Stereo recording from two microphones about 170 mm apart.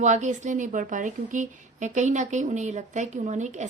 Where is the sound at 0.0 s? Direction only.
45° right (ahead or behind).